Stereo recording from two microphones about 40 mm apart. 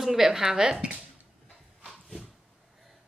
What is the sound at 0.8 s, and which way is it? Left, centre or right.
Speech, right.